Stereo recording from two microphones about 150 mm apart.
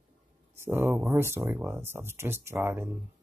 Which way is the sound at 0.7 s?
15° right (ahead or behind).